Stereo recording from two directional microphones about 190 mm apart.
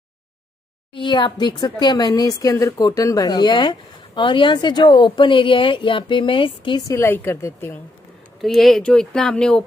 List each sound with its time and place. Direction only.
0.9 s speech: 25° left (ahead or behind)
7.0 s a woman's voice: 10° left (ahead or behind)
8.4 s speech: centre (ahead or behind)